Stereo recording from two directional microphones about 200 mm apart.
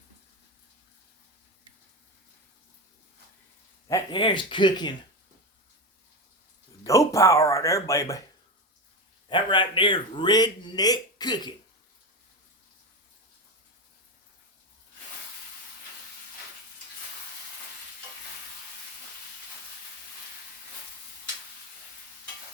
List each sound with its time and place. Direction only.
3.8 s speech: 20° left (ahead or behind)
6.8 s speech: 15° left (ahead or behind)
9.3 s speech: 25° left (ahead or behind)